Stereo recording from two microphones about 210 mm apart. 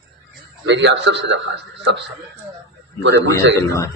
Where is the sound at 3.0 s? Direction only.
60° right (ahead or behind).